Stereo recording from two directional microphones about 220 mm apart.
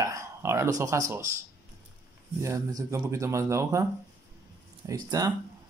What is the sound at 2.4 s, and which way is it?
Speech, 15° right (ahead or behind).